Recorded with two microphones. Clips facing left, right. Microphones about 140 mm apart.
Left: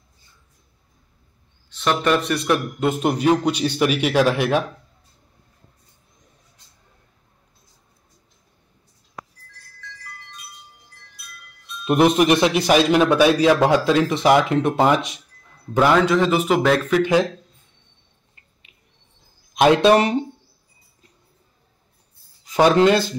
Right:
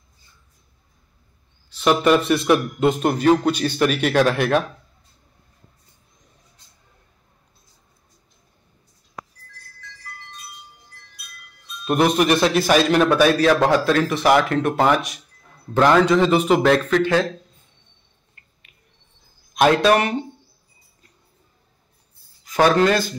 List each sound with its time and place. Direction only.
1.8 s a man's voice: 5° right (ahead or behind)
3.0 s a man's voice: 10° left (ahead or behind)
11.8 s music: 20° left (ahead or behind)
12.2 s a man's voice: 15° left (ahead or behind)
15.7 s a man's voice: 5° left (ahead or behind)
17.0 s a man's voice: 15° left (ahead or behind)
19.5 s speech: 20° left (ahead or behind)
22.4 s speech: 25° left (ahead or behind)